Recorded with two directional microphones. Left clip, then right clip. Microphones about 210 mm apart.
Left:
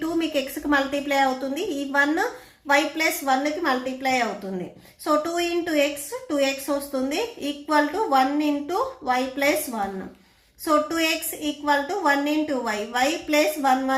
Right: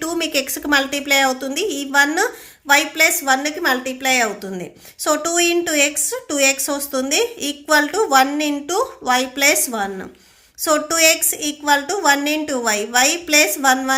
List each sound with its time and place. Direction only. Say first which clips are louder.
0.0 s a woman's voice: right 4 dB; 40° right (ahead or behind)